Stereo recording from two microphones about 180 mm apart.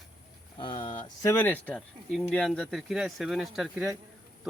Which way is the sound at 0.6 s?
30° left (ahead or behind).